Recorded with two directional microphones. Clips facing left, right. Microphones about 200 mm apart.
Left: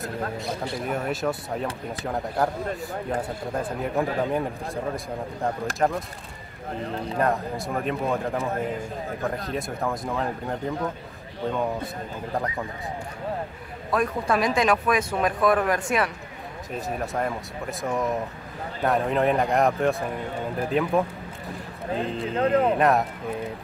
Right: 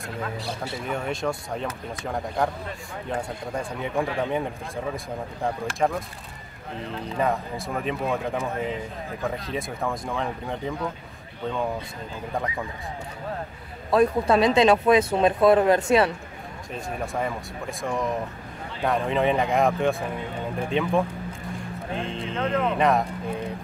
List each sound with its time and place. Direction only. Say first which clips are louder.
0.7 s a man's voice: even; 5° left (ahead or behind)
5.8 s a man's voice: even; centre (ahead or behind)
6.8 s speech: left 2 dB; 40° left (ahead or behind)
7.2 s a man's voice: left 1 dB; centre (ahead or behind)
12.3 s a man's voice: left 1 dB; centre (ahead or behind)
13.9 s speech: right 5 dB; 25° right (ahead or behind)
16.7 s a man's voice: left 1 dB; centre (ahead or behind)
22.3 s speech: left 4 dB; 35° left (ahead or behind)
22.8 s speech: left 1 dB; centre (ahead or behind)